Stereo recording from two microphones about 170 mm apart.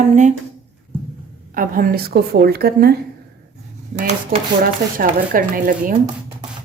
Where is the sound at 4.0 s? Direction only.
45° right (ahead or behind).